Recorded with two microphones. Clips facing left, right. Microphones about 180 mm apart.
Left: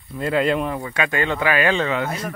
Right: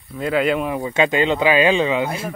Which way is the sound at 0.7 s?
20° right (ahead or behind).